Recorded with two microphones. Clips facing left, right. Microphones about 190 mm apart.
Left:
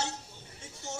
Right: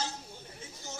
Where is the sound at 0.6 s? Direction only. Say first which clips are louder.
Left 5 dB; 75° left (ahead or behind).